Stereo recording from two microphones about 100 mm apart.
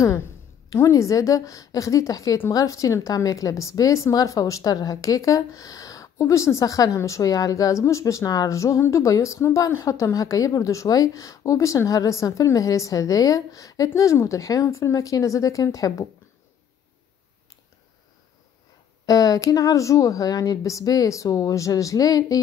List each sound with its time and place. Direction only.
0.7 s a woman's voice: 30° left (ahead or behind)
19.0 s a woman's voice: 35° left (ahead or behind)